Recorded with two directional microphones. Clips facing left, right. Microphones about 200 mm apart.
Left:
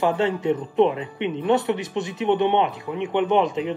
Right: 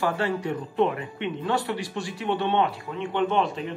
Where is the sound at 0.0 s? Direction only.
20° left (ahead or behind).